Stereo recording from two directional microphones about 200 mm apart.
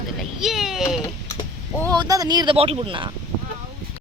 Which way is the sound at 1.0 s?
15° left (ahead or behind).